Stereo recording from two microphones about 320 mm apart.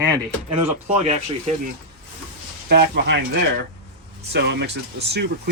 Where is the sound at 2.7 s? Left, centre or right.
Right.